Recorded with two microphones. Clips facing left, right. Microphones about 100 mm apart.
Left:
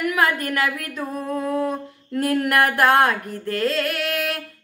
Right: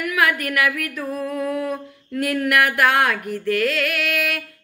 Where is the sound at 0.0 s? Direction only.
30° left (ahead or behind).